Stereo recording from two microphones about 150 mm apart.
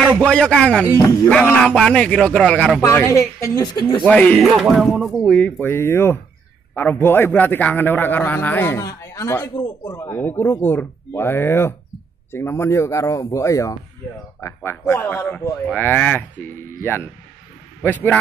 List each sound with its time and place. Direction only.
0.2 s a man's voice: 5° left (ahead or behind)
2.8 s speech: 15° left (ahead or behind)
4.0 s a man's voice: 10° left (ahead or behind)
5.6 s a man's voice: 15° left (ahead or behind)